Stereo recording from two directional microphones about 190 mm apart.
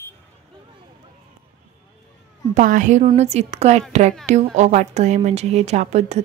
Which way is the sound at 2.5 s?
45° right (ahead or behind).